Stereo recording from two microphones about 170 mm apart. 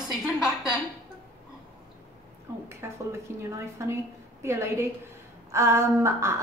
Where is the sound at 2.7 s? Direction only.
15° right (ahead or behind).